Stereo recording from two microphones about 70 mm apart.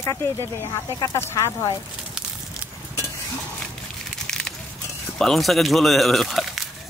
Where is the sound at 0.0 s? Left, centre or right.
Left.